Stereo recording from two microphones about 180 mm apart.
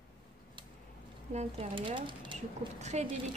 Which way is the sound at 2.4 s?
40° right (ahead or behind).